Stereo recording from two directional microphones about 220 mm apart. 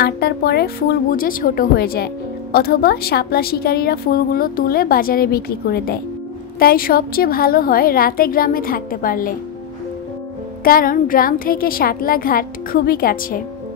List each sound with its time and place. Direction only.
0.0 s a woman's voice: 45° left (ahead or behind)
10.6 s a woman's voice: 40° left (ahead or behind)